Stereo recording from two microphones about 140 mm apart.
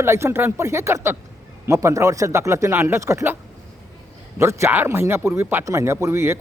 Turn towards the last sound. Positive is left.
turn(degrees=-20)  # may be behind; listen again after turning